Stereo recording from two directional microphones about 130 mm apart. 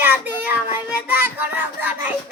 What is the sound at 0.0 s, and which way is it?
Child singing, 15° right (ahead or behind).